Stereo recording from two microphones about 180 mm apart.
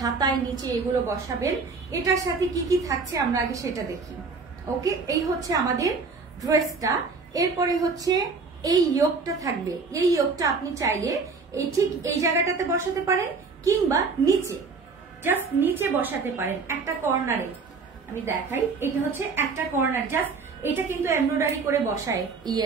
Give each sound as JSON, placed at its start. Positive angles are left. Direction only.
{"t": 0.0, "sound": "a woman's voice", "side_deg": -20}
{"t": 4.8, "sound": "a woman's voice", "side_deg": -20}
{"t": 7.3, "sound": "a woman's voice", "side_deg": -20}